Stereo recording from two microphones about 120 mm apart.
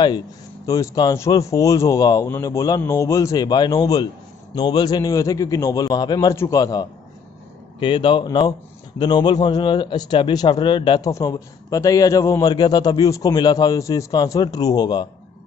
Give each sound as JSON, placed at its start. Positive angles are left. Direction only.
{"t": 0.7, "sound": "a man's voice", "side_deg": 25}
{"t": 7.8, "sound": "a man's voice", "side_deg": 45}
{"t": 11.1, "sound": "a man's voice", "side_deg": 25}